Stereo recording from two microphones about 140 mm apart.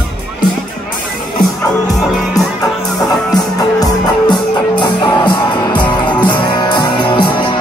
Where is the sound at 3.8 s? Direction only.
35° left (ahead or behind).